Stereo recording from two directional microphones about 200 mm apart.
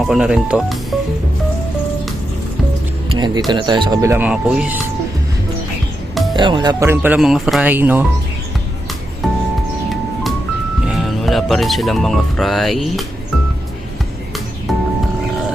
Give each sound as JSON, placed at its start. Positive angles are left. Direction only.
{"t": 0.0, "sound": "speech", "side_deg": 0}
{"t": 3.1, "sound": "music", "side_deg": -20}
{"t": 3.5, "sound": "speech", "side_deg": -20}
{"t": 6.3, "sound": "speech", "side_deg": -25}
{"t": 10.8, "sound": "speech", "side_deg": 0}
{"t": 14.7, "sound": "music", "side_deg": 0}